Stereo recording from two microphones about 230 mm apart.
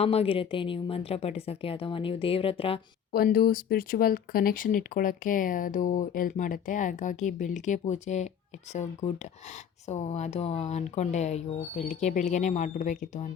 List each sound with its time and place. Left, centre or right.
0.0 s speech: left
3.1 s speech: left